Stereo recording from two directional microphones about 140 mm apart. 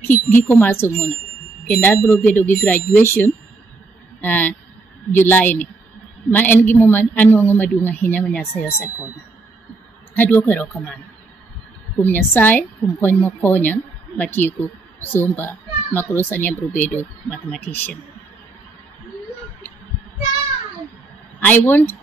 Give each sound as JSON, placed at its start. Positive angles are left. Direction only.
{"t": 0.1, "sound": "speech", "side_deg": 15}
{"t": 10.1, "sound": "speech", "side_deg": 15}
{"t": 12.0, "sound": "speech", "side_deg": 15}
{"t": 21.4, "sound": "speech", "side_deg": 15}